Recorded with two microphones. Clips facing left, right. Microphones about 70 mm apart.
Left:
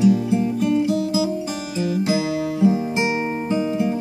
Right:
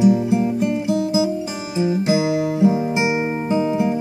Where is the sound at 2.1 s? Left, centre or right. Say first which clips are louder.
Right 3 dB; centre.